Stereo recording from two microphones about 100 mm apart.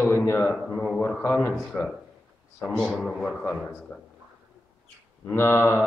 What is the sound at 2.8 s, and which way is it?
Speech, 5° left (ahead or behind).